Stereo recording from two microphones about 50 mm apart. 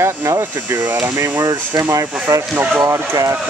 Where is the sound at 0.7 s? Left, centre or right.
Right.